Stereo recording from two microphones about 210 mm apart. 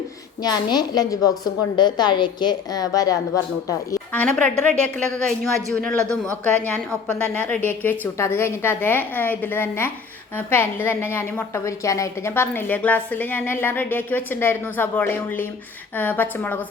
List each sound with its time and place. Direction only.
0.4 s a woman's voice: 20° left (ahead or behind)